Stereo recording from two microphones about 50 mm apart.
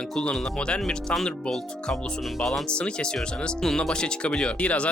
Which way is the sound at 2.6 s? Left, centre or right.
Centre.